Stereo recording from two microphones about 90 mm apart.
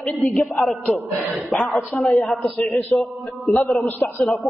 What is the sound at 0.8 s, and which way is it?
Speech, 20° left (ahead or behind).